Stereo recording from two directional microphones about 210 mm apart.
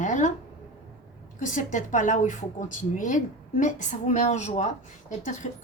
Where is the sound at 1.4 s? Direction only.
40° left (ahead or behind).